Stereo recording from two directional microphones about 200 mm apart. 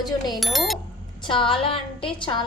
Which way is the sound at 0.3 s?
Centre (ahead or behind).